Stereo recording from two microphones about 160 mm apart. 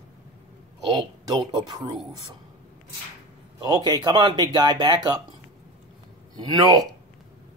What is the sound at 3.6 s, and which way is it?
Speech, 25° right (ahead or behind).